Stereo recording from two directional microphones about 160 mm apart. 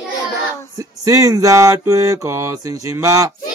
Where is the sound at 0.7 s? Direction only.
20° right (ahead or behind).